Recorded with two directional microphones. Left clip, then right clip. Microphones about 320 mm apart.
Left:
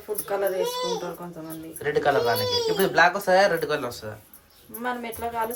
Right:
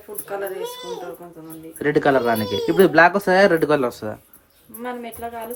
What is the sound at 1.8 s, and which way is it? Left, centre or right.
Speech, right.